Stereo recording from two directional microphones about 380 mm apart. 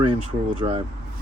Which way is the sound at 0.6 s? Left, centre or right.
Centre.